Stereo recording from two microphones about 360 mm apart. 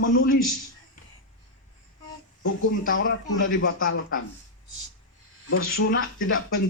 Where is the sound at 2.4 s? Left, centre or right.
Left.